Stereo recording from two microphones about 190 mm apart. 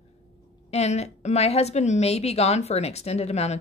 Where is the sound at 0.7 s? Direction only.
35° left (ahead or behind).